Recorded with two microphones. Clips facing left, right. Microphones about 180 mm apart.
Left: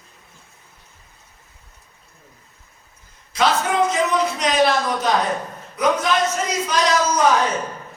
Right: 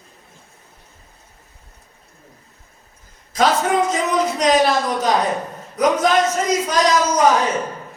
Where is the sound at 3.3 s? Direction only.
40° right (ahead or behind).